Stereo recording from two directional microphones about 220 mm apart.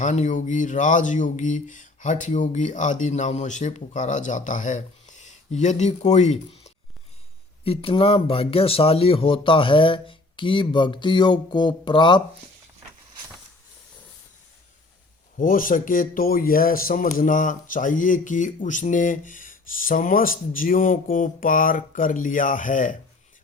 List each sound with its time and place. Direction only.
0.0 s speech: 35° left (ahead or behind)
15.4 s speech: 40° left (ahead or behind)